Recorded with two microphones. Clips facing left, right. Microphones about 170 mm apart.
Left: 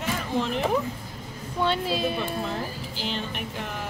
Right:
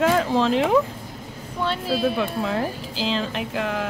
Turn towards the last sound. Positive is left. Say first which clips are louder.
# right 7 dB
turn(degrees=-90)